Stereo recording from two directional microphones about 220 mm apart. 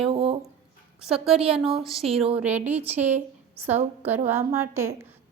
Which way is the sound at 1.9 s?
Centre (ahead or behind).